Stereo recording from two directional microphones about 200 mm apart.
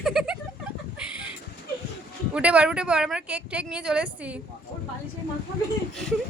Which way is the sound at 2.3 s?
5° right (ahead or behind).